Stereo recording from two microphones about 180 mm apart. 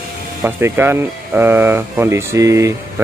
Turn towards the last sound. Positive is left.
turn(degrees=-15)  # may be behind; listen again after turning